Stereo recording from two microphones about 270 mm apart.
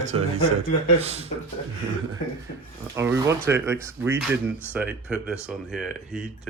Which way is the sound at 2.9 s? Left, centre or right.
Centre.